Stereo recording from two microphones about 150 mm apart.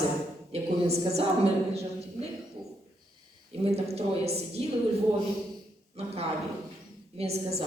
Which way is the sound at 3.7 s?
45° right (ahead or behind).